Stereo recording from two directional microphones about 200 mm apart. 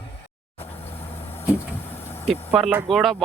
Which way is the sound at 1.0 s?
10° left (ahead or behind).